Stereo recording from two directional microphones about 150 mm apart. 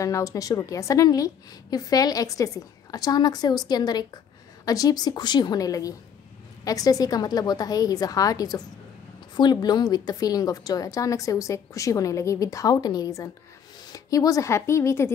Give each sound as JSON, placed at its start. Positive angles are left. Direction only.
{"t": 0.0, "sound": "a woman's voice", "side_deg": 20}